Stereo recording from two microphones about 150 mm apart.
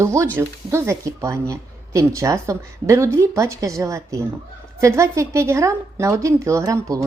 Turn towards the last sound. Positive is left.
turn(degrees=-20)  # may be behind; listen again after turning